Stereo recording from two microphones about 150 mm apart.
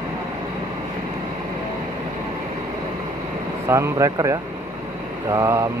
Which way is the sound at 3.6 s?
20° right (ahead or behind).